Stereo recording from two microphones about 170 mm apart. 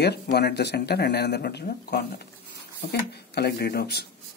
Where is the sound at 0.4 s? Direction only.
75° left (ahead or behind).